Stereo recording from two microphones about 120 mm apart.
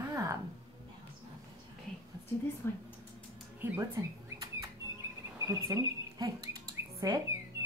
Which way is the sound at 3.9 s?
30° right (ahead or behind).